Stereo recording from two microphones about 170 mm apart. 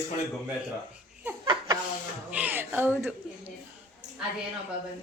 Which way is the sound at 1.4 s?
30° right (ahead or behind).